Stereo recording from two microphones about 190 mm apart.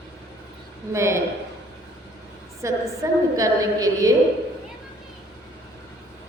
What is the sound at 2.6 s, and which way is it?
A woman's voice, 15° right (ahead or behind).